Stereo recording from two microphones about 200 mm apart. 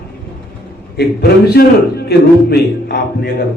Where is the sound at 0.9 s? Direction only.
50° left (ahead or behind).